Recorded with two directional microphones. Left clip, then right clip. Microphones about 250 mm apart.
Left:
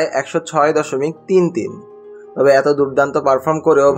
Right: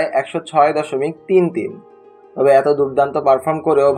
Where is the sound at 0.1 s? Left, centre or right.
Left.